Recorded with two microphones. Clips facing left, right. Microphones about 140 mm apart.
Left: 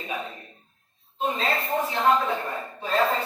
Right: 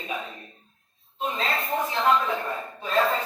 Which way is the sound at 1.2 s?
30° left (ahead or behind).